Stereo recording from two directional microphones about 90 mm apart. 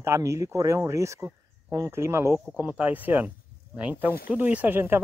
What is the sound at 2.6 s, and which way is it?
Speech, 20° right (ahead or behind).